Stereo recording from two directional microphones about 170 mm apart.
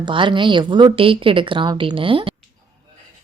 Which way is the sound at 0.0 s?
30° right (ahead or behind).